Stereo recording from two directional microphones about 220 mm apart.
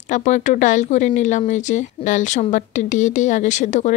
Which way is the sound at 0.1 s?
35° left (ahead or behind).